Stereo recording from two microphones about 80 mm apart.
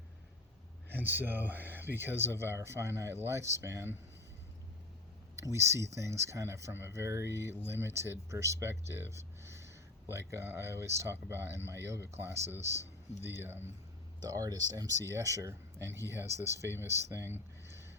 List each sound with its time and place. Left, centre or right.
0.9 s speech: right
5.4 s speech: right
14.2 s speech: right